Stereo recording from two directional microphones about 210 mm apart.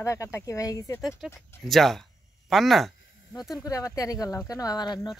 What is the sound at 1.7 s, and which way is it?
Speech, centre (ahead or behind).